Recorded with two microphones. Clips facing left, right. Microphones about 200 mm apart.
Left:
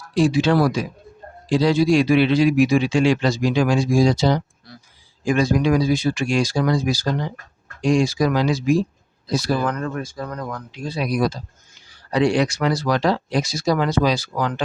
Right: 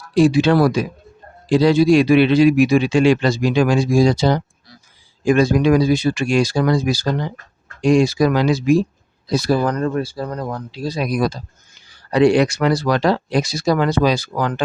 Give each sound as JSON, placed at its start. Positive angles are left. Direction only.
{"t": 0.1, "sound": "a man's voice", "side_deg": -60}
{"t": 9.5, "sound": "speech", "side_deg": -35}
{"t": 12.1, "sound": "a man's voice", "side_deg": -60}